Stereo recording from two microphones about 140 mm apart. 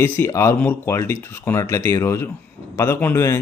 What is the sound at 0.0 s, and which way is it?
Speech, 20° left (ahead or behind).